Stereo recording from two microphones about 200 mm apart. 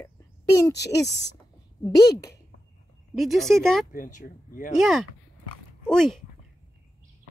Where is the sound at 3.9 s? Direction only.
40° left (ahead or behind).